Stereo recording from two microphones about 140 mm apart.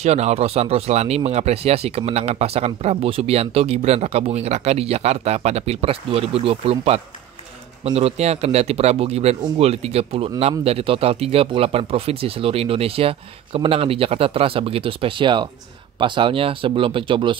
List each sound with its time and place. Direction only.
0.0 s speech: 50° right (ahead or behind)